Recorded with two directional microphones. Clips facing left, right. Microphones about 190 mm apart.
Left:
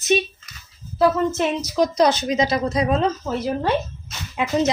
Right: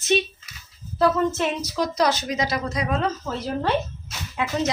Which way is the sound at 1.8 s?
20° left (ahead or behind).